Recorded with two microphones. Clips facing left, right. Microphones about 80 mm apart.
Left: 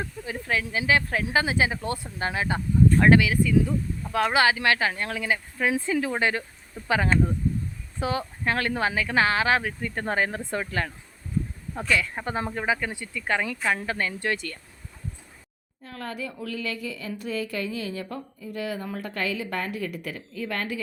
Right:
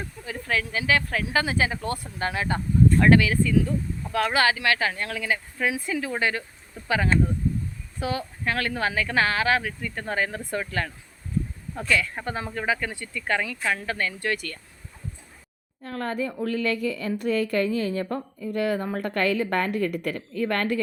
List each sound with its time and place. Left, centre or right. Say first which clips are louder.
0.4 s speech: even; centre
15.8 s speech: right 6 dB; right
18.3 s speech: right 6 dB; right